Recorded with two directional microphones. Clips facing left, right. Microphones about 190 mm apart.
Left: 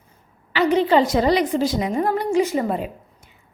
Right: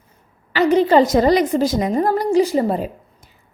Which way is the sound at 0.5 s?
40° right (ahead or behind).